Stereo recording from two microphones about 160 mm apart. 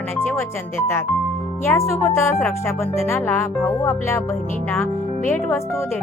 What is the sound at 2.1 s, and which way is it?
Music, 15° left (ahead or behind).